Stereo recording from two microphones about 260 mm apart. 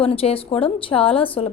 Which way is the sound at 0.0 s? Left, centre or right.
Left.